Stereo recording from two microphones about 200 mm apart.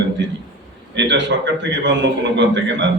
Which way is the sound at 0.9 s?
60° right (ahead or behind).